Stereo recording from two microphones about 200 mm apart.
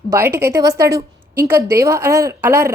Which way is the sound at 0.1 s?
15° right (ahead or behind).